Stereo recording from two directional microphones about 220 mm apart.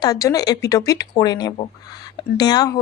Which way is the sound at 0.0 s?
15° left (ahead or behind).